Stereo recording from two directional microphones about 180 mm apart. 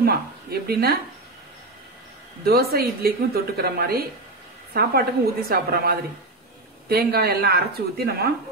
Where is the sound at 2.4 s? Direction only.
60° right (ahead or behind).